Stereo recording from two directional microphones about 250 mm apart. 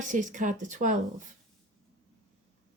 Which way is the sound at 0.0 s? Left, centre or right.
Right.